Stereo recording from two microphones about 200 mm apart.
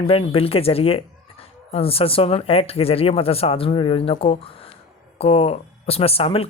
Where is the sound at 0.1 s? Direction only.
30° left (ahead or behind).